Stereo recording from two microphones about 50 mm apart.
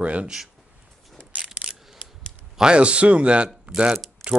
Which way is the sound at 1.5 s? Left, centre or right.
Centre.